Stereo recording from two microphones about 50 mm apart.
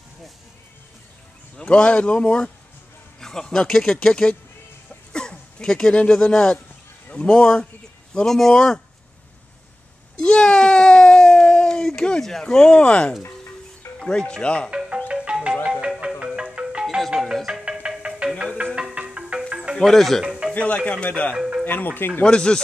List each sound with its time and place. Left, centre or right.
1.6 s speech: left
5.1 s a sound: centre
6.2 s a man's voice: centre
8.3 s speech: centre
10.2 s a sound: centre
13.9 s speech: centre
15.0 s music: right
17.0 s music: centre
17.7 s music: centre
18.9 s marimba: right
19.8 s speech: centre
20.5 s speech: left
21.6 s speech: left
22.2 s speech: centre